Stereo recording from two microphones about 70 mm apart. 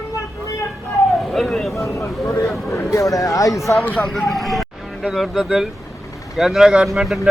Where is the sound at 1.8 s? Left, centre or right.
Left.